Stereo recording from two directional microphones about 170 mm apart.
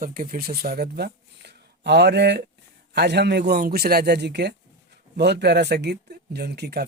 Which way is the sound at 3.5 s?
65° right (ahead or behind).